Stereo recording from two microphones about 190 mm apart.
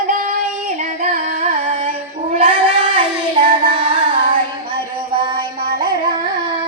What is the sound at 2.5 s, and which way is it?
Music, 25° right (ahead or behind).